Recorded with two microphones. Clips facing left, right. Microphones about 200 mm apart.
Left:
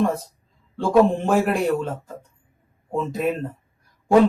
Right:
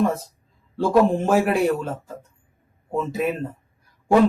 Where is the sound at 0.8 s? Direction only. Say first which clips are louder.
Left 1 dB; 5° right (ahead or behind).